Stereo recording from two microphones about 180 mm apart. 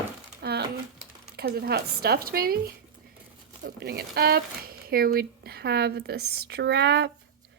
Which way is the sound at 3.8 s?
65° right (ahead or behind).